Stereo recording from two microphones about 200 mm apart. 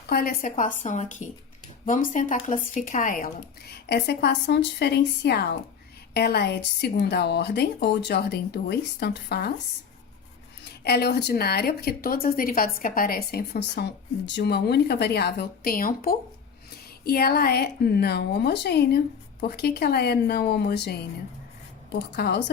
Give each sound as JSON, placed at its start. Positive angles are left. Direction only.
{"t": 0.1, "sound": "speech", "side_deg": 45}
{"t": 3.8, "sound": "a woman's voice", "side_deg": 55}
{"t": 10.8, "sound": "a woman's voice", "side_deg": 55}
{"t": 22.1, "sound": "a woman's voice", "side_deg": 55}